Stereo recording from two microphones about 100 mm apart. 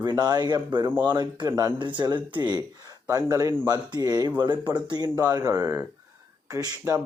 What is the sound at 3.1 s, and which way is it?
Speech, 35° right (ahead or behind).